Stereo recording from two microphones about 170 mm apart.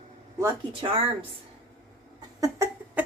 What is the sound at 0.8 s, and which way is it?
Speech, 35° right (ahead or behind).